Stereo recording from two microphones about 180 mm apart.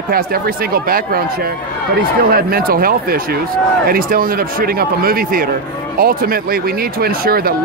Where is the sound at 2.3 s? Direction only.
55° right (ahead or behind).